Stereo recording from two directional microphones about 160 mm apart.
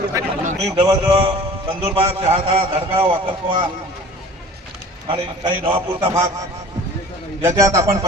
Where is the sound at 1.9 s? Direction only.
40° right (ahead or behind).